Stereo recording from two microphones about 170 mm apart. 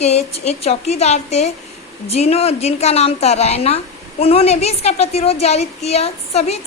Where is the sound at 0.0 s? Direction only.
40° left (ahead or behind).